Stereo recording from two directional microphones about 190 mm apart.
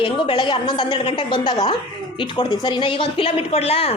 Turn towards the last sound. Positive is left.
turn(degrees=30)  # may be behind; listen again after turning